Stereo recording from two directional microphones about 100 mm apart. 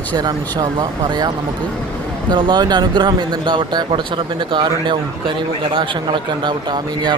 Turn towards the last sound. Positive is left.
turn(degrees=-45)  # may be behind; listen again after turning